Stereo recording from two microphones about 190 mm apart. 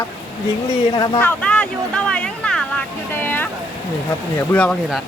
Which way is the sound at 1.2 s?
10° left (ahead or behind).